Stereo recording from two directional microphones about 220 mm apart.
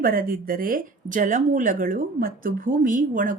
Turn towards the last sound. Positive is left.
turn(degrees=-35)  # may be behind; listen again after turning